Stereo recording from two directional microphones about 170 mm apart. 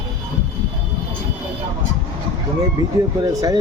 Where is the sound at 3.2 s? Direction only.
25° right (ahead or behind).